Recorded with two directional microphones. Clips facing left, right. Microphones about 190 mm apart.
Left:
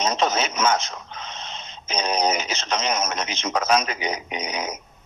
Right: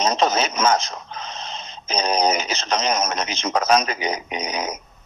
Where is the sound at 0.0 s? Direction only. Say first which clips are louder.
Right 3 dB; 35° right (ahead or behind).